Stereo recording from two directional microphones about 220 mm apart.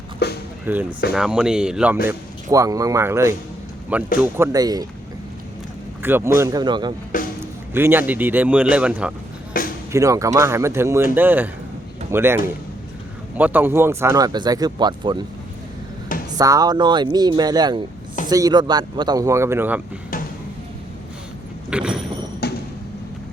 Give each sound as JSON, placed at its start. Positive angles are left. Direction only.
{"t": 0.2, "sound": "music", "side_deg": 45}
{"t": 0.6, "sound": "speech", "side_deg": -10}
{"t": 6.0, "sound": "speech", "side_deg": -10}
{"t": 7.1, "sound": "music", "side_deg": 40}
{"t": 7.7, "sound": "speech", "side_deg": -10}
{"t": 9.5, "sound": "music", "side_deg": 40}
{"t": 9.9, "sound": "speech", "side_deg": -15}
{"t": 16.4, "sound": "speech", "side_deg": -15}
{"t": 21.7, "sound": "mechanisms", "side_deg": -5}
{"t": 22.4, "sound": "a sound", "side_deg": 45}